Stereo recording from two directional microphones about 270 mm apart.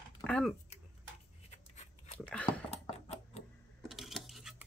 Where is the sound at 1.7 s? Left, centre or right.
Left.